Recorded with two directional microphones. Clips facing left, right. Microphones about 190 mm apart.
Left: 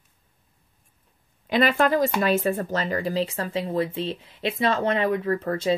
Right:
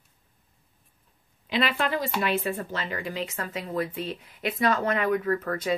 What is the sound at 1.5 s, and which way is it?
Speech, 45° left (ahead or behind).